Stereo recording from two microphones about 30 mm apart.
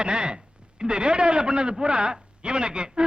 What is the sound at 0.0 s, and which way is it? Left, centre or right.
A man's voice, right.